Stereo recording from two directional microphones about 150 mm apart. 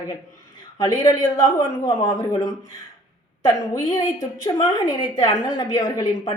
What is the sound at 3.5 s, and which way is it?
A woman's voice, 25° left (ahead or behind).